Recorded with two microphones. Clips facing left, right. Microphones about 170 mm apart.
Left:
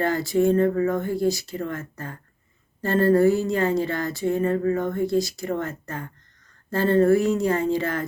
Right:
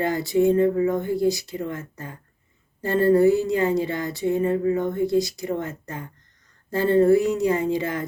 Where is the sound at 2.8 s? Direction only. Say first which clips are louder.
Right 1 dB; 15° right (ahead or behind).